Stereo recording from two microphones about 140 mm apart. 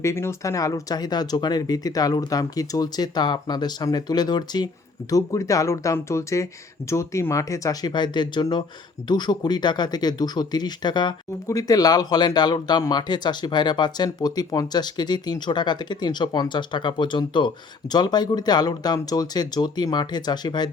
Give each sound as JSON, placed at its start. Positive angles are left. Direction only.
{"t": 0.0, "sound": "speech", "side_deg": 20}